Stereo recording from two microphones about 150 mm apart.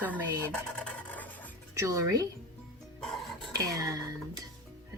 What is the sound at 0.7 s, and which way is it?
Filing, 5° left (ahead or behind).